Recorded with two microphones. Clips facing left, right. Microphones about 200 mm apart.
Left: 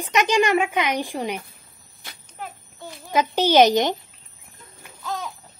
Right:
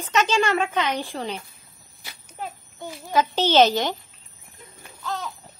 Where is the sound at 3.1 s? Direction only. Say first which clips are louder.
Left 1 dB; 15° left (ahead or behind).